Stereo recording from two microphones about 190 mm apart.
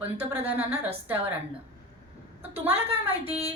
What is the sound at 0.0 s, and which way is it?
Speech, 10° right (ahead or behind).